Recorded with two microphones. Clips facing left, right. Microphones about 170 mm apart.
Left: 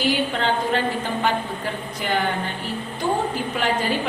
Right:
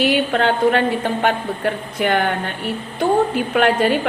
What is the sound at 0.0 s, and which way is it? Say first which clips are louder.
A woman's voice: right 5 dB; 65° right (ahead or behind).